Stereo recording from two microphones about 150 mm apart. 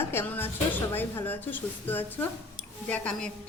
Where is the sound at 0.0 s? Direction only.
15° left (ahead or behind).